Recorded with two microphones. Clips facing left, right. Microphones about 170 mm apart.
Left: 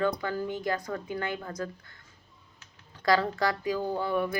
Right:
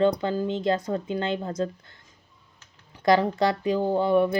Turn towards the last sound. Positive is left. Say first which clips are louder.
# right 8 dB
turn(degrees=-20)  # may be behind; listen again after turning